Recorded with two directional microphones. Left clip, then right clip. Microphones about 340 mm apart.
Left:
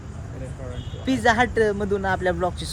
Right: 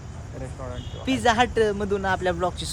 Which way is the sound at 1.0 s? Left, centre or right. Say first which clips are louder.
Left 1 dB; centre.